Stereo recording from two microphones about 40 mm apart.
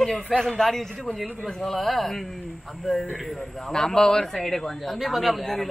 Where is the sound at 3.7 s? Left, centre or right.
Centre.